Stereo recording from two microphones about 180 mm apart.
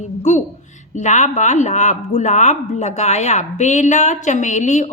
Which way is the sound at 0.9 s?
40° left (ahead or behind).